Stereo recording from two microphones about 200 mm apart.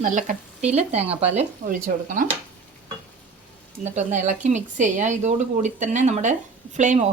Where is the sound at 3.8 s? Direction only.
35° right (ahead or behind).